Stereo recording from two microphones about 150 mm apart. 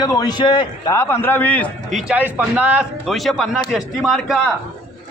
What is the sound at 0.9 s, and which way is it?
Speech, 15° left (ahead or behind).